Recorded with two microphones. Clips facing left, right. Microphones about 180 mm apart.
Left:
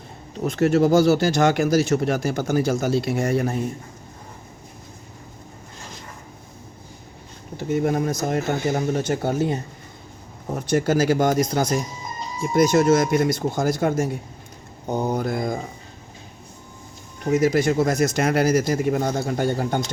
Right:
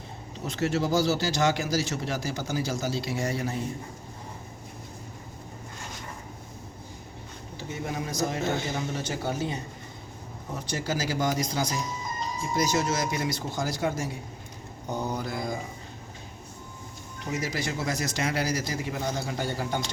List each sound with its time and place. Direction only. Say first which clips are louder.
0.4 s speech: left 9 dB; 50° left (ahead or behind)
7.5 s speech: left 12 dB; 55° left (ahead or behind)
17.2 s speech: left 13 dB; 50° left (ahead or behind)